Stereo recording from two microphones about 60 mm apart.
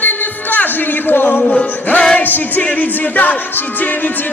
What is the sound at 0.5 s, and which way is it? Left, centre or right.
Music, left.